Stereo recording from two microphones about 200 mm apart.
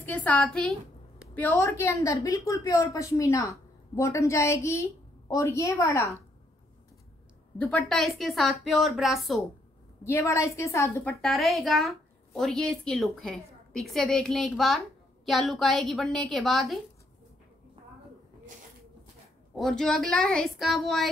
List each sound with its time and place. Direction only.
0.0 s a woman's voice: 10° left (ahead or behind)
7.5 s a woman's voice: 5° left (ahead or behind)
10.0 s a woman's voice: 15° left (ahead or behind)
11.1 s a woman's voice: centre (ahead or behind)
19.5 s a woman's voice: centre (ahead or behind)